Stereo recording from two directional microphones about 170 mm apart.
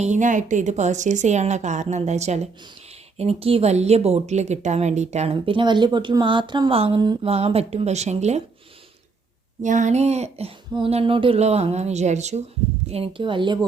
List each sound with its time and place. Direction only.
0.0 s a woman's voice: 45° right (ahead or behind)
9.6 s a woman's voice: 45° right (ahead or behind)
12.9 s speech: 30° right (ahead or behind)